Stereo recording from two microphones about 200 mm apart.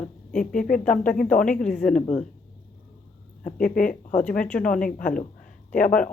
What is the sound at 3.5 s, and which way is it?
Speech, 45° left (ahead or behind).